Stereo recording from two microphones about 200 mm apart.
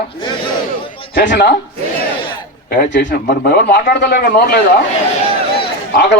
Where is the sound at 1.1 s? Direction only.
60° left (ahead or behind).